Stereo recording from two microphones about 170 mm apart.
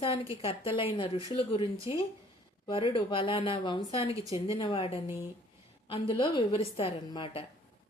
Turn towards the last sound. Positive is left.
turn(degrees=30)  # may be behind; listen again after turning